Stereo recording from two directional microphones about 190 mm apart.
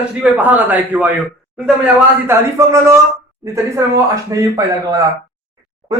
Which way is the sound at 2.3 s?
15° right (ahead or behind).